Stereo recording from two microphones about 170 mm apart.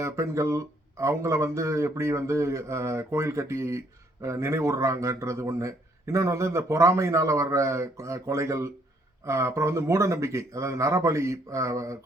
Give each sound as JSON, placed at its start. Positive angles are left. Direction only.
{"t": 0.0, "sound": "speech", "side_deg": -15}